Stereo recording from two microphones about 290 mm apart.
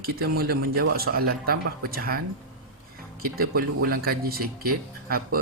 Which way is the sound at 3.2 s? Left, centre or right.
Right.